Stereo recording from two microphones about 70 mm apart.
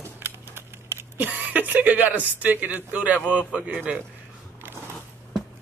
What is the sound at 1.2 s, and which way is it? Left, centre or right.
Speech, right.